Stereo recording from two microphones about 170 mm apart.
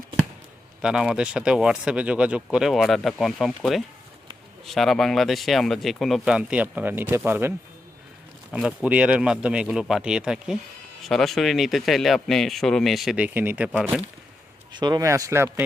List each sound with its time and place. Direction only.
0.8 s speech: 5° right (ahead or behind)
8.5 s speech: 10° right (ahead or behind)
14.7 s speech: 25° right (ahead or behind)